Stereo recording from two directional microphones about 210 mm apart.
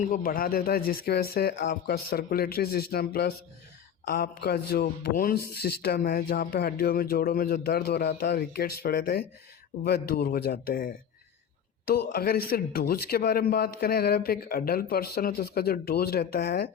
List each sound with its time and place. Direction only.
0.0 s a man's voice: 40° left (ahead or behind)